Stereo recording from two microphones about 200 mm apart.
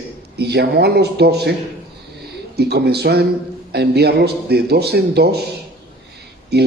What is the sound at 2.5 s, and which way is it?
A man's voice, 55° right (ahead or behind).